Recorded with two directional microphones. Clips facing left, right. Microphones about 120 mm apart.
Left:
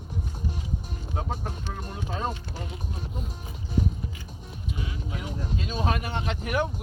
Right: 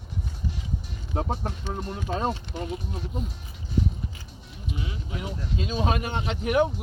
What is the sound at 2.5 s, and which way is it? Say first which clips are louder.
Speech: right 5 dB; 20° right (ahead or behind).